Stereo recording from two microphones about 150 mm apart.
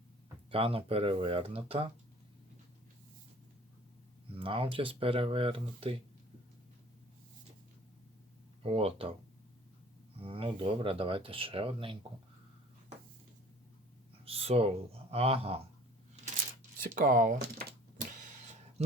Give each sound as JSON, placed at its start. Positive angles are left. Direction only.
{"t": 0.5, "sound": "speech", "side_deg": -40}
{"t": 4.4, "sound": "speech", "side_deg": -35}
{"t": 8.6, "sound": "speech", "side_deg": -40}
{"t": 10.2, "sound": "speech", "side_deg": -40}
{"t": 14.3, "sound": "a sound", "side_deg": -40}
{"t": 15.1, "sound": "speech", "side_deg": -40}
{"t": 16.8, "sound": "speech", "side_deg": -65}